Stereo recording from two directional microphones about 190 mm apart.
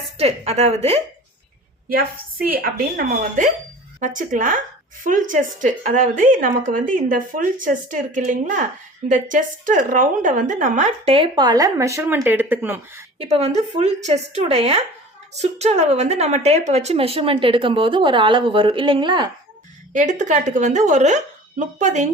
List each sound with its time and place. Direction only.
0.2 s a woman's voice: 35° right (ahead or behind)
2.5 s speech: 50° right (ahead or behind); by 13.1 s 10° right (ahead or behind)
13.1 s a woman's voice: 30° right (ahead or behind)
19.9 s a woman's voice: 40° right (ahead or behind)